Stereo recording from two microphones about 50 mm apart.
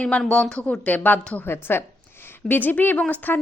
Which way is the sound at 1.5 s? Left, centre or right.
Left.